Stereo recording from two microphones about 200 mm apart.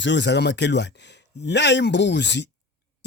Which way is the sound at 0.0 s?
60° left (ahead or behind).